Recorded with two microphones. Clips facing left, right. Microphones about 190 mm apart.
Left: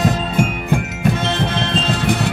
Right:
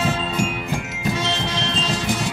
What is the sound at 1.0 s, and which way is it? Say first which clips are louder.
Music: left 2 dB; 55° left (ahead or behind).